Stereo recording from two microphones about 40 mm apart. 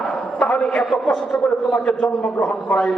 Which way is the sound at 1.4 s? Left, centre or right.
Left.